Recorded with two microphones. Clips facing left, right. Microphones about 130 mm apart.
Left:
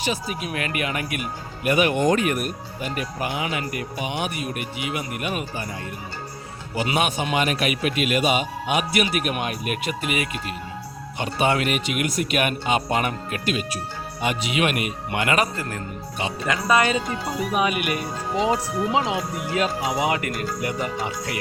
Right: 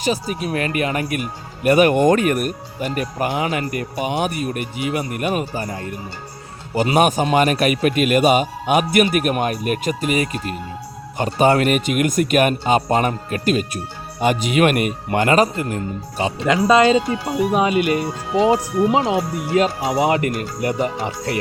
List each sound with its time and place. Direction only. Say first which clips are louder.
0.0 s speech: right 5 dB; 40° right (ahead or behind)
16.6 s speech: right 6 dB; 25° right (ahead or behind)